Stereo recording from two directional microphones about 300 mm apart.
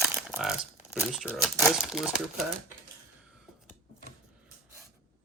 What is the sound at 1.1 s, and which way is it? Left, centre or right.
Speech, centre.